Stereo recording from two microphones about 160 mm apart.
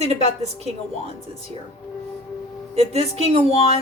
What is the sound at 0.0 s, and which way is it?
Speech, 45° right (ahead or behind).